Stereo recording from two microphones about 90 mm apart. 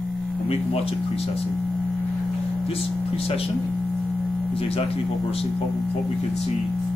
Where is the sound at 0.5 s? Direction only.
90° left.